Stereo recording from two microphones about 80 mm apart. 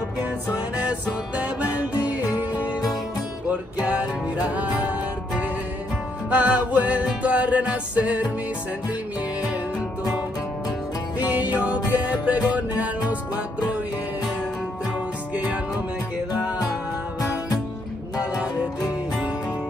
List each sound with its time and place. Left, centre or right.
0.7 s music: centre
3.8 s music: centre
6.3 s music: centre
11.2 s music: centre
15.3 s music: centre